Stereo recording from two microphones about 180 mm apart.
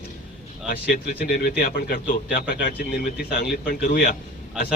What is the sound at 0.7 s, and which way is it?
Speech, 55° left (ahead or behind).